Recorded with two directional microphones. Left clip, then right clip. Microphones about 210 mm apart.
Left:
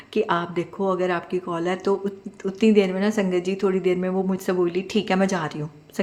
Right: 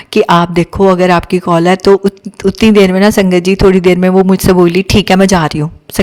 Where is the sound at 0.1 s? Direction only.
55° right (ahead or behind).